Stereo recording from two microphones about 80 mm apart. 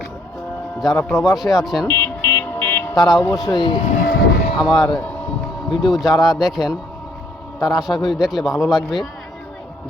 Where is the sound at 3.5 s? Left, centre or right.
Left.